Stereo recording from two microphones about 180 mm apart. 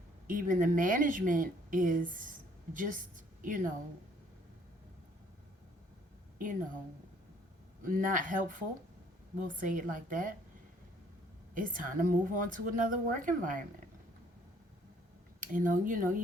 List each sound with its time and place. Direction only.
0.3 s a woman's voice: 50° right (ahead or behind)
7.9 s speech: 50° right (ahead or behind)
11.5 s speech: 50° right (ahead or behind)
15.4 s speech: 50° right (ahead or behind)